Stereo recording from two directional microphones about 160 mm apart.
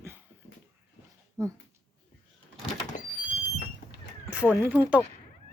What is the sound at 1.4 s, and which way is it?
Speech, 20° right (ahead or behind).